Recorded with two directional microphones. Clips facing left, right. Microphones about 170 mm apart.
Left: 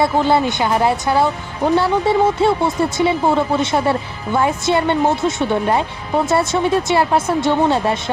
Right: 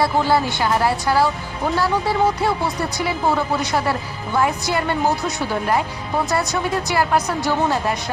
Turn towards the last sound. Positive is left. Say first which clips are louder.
# left 4 dB
turn(degrees=25)  # may be behind; listen again after turning